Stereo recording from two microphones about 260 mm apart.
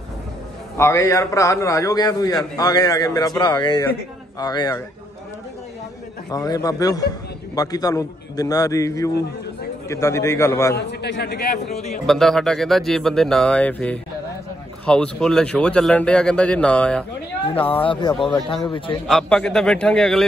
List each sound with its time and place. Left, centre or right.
0.7 s a man's voice: centre
6.3 s a man's voice: centre
10.8 s a man's voice: left
12.1 s a man's voice: centre
17.6 s speech: left
19.0 s a man's voice: centre